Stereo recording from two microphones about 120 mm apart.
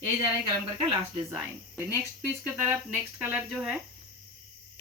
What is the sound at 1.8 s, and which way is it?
Speech, 20° right (ahead or behind).